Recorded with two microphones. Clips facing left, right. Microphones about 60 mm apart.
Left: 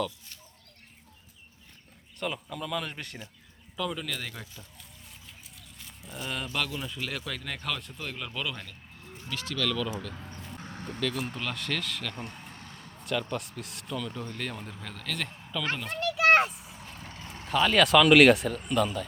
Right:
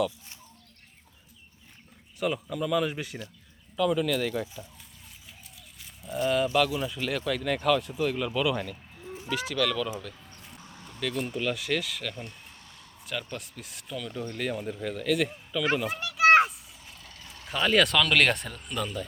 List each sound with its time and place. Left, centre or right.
2.1 s speech: centre
5.5 s speech: centre
10.6 s a sound: left
11.0 s speech: centre
12.1 s a sound: left
13.1 s speech: centre
16.6 s a sound: left
17.0 s vehicle: left
17.5 s speech: centre